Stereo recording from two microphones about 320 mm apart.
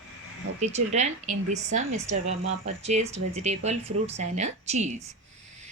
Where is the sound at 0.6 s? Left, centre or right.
Right.